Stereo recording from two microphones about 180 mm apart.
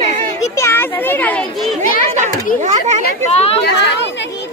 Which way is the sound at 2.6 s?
40° right (ahead or behind).